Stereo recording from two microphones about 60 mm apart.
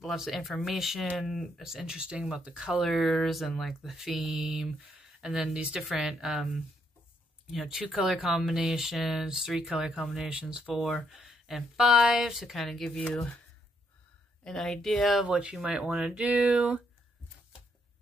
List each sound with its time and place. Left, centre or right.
0.0 s speech: centre
2.8 s speech: centre
10.7 s speech: centre
14.4 s speech: centre
15.2 s speech: centre
16.3 s a sound: right